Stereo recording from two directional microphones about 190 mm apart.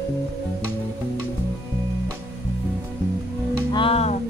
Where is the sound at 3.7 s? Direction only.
30° left (ahead or behind).